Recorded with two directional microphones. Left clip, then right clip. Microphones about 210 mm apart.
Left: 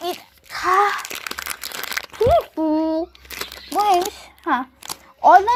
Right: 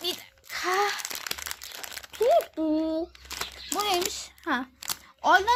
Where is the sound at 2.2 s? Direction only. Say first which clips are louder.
Left 6 dB; 5° left (ahead or behind).